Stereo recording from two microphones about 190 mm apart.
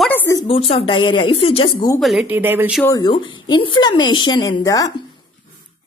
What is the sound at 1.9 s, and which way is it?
Speech, centre (ahead or behind).